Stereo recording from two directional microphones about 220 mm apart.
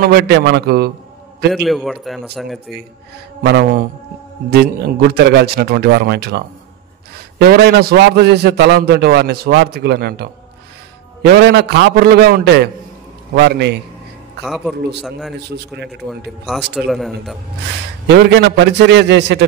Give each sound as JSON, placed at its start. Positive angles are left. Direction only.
{"t": 0.1, "sound": "a man's voice", "side_deg": -50}
{"t": 1.5, "sound": "a man's voice", "side_deg": 0}
{"t": 3.4, "sound": "a man's voice", "side_deg": -45}
{"t": 14.4, "sound": "a man's voice", "side_deg": 0}
{"t": 15.5, "sound": "a man's voice", "side_deg": -50}
{"t": 16.7, "sound": "a man's voice", "side_deg": 0}
{"t": 18.0, "sound": "a man's voice", "side_deg": -50}